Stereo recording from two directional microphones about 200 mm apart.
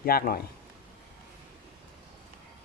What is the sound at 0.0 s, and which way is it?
Speech, 50° left (ahead or behind).